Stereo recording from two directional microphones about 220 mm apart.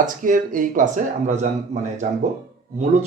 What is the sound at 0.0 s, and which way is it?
Speech, 35° right (ahead or behind).